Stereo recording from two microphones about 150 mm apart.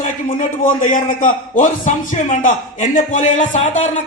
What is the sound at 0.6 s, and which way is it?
A man's voice, 60° left (ahead or behind).